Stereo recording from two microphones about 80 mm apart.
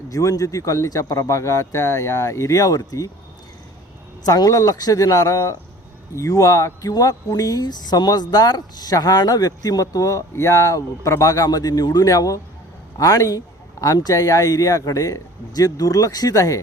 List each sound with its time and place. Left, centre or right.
0.1 s speech: left
4.3 s speech: left